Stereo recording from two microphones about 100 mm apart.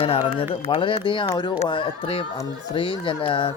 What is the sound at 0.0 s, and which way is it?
Speech, 70° left (ahead or behind).